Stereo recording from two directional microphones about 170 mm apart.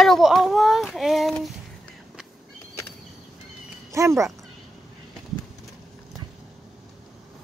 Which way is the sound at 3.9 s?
15° right (ahead or behind).